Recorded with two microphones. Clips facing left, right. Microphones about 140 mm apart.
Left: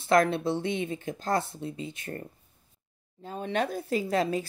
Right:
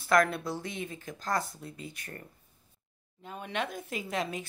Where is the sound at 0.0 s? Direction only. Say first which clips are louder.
Left 3 dB; 25° left (ahead or behind).